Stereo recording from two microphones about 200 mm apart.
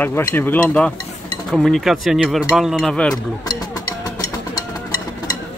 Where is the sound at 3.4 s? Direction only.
20° left (ahead or behind).